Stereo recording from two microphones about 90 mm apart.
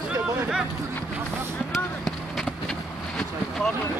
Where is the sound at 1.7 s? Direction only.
Centre (ahead or behind).